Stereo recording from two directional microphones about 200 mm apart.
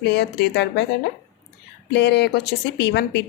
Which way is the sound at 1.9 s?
60° left (ahead or behind).